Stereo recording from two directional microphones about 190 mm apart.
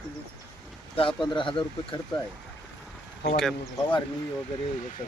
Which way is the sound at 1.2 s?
25° left (ahead or behind).